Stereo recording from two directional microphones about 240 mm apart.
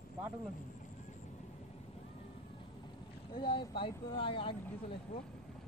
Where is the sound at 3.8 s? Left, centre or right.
Left.